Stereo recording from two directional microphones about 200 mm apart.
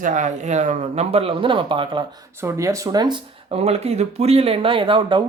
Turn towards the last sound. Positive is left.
turn(degrees=-25)  # may be behind; listen again after turning